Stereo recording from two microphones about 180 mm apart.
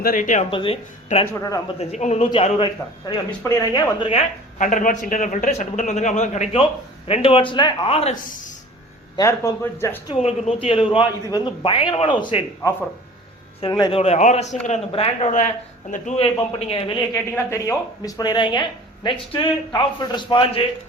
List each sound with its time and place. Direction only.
0.0 s a man's voice: 50° left (ahead or behind)
0.5 s speech: 30° left (ahead or behind)
1.3 s speech: 20° left (ahead or behind)
1.8 s a man's voice: 40° left (ahead or behind)
3.1 s speech: 20° left (ahead or behind)
4.0 s a woman's voice: 30° left (ahead or behind)
4.6 s a man's voice: 45° left (ahead or behind)
8.1 s a man's voice: 50° left (ahead or behind)
9.1 s a man's voice: 15° left (ahead or behind)
10.1 s speech: 35° left (ahead or behind)
13.6 s speech: 25° left (ahead or behind)
14.0 s a man's voice: 40° left (ahead or behind)
17.3 s speech: 15° left (ahead or behind)